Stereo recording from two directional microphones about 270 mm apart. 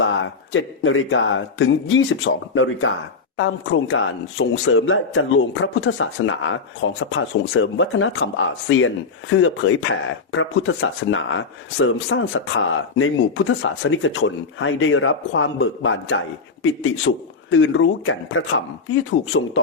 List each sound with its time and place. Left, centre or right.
0.0 s speech: left